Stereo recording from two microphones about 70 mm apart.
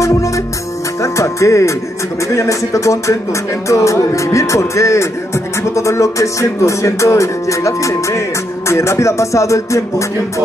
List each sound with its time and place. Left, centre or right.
1.0 s music: left